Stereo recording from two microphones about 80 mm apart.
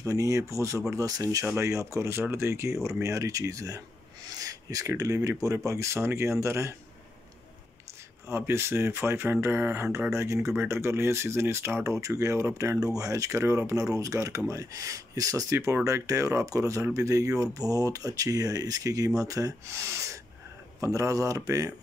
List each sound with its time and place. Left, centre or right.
0.0 s speech: right
4.3 s a sound: right
5.7 s speech: right
8.3 s speech: right
9.9 s speech: right
11.8 s speech: right
20.8 s speech: right